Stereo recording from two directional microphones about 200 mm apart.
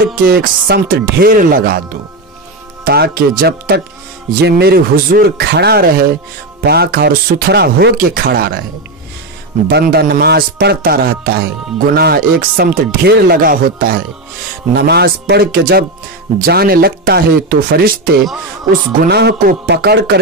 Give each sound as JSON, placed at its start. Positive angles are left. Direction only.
{"t": 0.0, "sound": "speech", "side_deg": -45}
{"t": 2.8, "sound": "speech", "side_deg": -50}
{"t": 9.7, "sound": "speech", "side_deg": -50}